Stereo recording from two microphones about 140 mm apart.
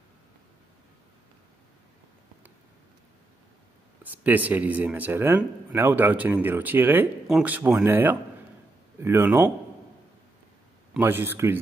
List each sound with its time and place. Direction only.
4.0 s speech: 10° right (ahead or behind)
11.0 s speech: 15° right (ahead or behind)